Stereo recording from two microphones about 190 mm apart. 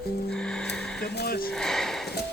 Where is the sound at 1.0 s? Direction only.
55° left (ahead or behind).